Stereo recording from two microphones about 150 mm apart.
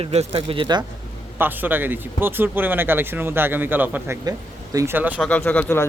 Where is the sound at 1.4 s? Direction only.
15° right (ahead or behind).